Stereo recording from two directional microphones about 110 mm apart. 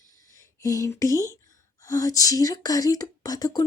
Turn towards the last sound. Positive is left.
turn(degrees=35)  # may be behind; listen again after turning